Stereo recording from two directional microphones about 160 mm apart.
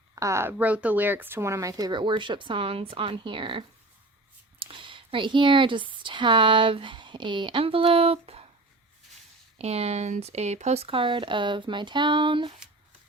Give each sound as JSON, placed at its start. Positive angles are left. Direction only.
{"t": 0.2, "sound": "speech", "side_deg": -15}
{"t": 4.6, "sound": "speech", "side_deg": -30}
{"t": 9.6, "sound": "speech", "side_deg": -40}